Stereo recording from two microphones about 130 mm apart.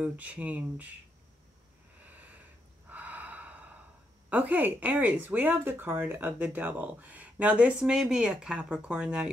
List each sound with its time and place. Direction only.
0.0 s speech: 10° right (ahead or behind)
2.0 s a sound: 10° right (ahead or behind)
2.9 s gasp: 10° right (ahead or behind)
4.3 s speech: 10° right (ahead or behind)